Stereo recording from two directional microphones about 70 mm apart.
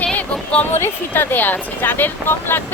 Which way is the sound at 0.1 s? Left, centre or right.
Left.